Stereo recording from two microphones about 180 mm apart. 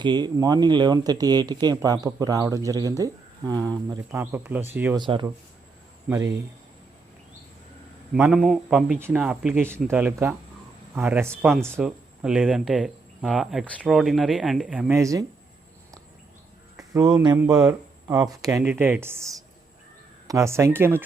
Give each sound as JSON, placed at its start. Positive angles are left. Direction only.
{"t": 0.0, "sound": "speech", "side_deg": -25}
{"t": 4.9, "sound": "speech", "side_deg": -25}
{"t": 8.1, "sound": "speech", "side_deg": -5}
{"t": 11.3, "sound": "speech", "side_deg": 0}
{"t": 16.7, "sound": "speech", "side_deg": -20}